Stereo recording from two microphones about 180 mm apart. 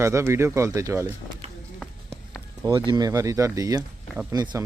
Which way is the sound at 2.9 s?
20° right (ahead or behind).